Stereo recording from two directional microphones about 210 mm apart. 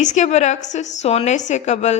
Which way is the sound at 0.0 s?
35° left (ahead or behind).